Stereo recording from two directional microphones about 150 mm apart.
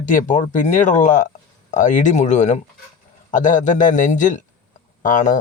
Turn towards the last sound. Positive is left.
turn(degrees=55)  # may be behind; listen again after turning